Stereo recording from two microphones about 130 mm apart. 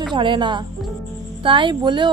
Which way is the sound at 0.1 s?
40° right (ahead or behind).